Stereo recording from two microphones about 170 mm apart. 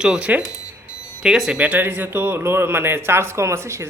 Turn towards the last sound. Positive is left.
turn(degrees=-15)  # may be behind; listen again after turning